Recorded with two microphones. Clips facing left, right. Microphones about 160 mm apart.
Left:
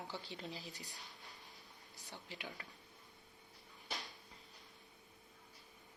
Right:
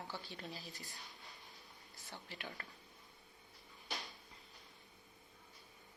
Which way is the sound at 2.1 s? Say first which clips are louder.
Even; 15° left (ahead or behind).